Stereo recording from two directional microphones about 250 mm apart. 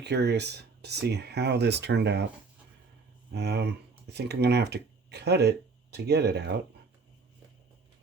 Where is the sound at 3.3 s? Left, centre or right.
Right.